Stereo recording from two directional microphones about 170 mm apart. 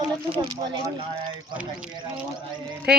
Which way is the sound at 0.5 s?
25° right (ahead or behind).